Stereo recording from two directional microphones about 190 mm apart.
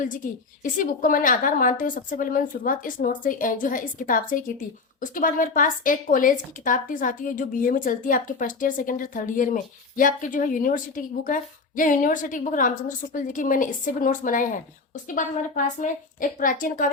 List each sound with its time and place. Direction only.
0.2 s a woman's voice: 45° left (ahead or behind)